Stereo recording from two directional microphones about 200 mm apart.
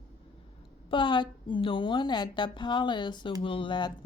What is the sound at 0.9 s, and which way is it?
A woman's voice, 25° left (ahead or behind).